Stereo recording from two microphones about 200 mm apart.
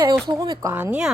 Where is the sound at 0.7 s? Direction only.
5° right (ahead or behind).